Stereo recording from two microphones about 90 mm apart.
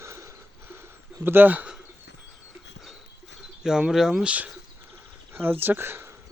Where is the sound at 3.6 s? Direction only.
10° right (ahead or behind).